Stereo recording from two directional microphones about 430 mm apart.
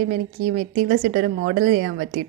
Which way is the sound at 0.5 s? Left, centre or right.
Centre.